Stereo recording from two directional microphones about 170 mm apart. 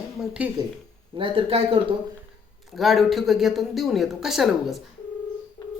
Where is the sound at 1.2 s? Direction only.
30° right (ahead or behind).